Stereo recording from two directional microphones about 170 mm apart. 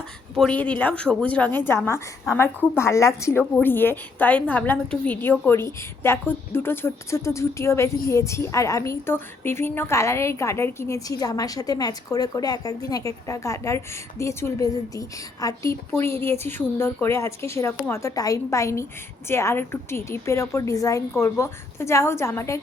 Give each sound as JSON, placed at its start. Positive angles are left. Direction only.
{"t": 0.3, "sound": "a woman's voice", "side_deg": 5}